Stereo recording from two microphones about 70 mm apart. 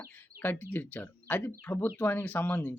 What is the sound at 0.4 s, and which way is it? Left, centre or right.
Speech, left.